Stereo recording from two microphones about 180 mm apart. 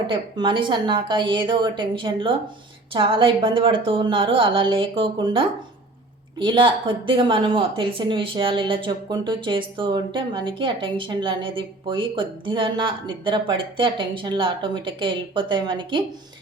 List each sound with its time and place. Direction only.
0.1 s a woman's voice: 25° right (ahead or behind)